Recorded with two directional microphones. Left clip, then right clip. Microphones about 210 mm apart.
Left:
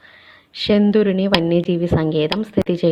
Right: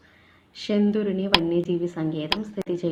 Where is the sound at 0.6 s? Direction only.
35° left (ahead or behind).